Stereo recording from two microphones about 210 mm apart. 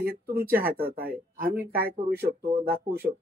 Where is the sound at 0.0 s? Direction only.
50° right (ahead or behind).